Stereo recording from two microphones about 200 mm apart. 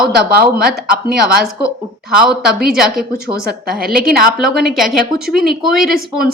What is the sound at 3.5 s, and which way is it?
Speech, 50° right (ahead or behind).